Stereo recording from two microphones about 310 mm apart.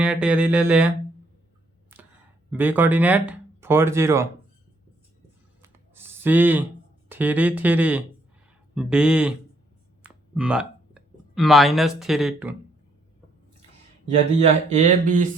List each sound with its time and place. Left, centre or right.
0.0 s speech: centre
2.5 s speech: centre
5.6 s writing: centre
7.1 s speech: centre
10.0 s a sound: centre
14.3 s speech: right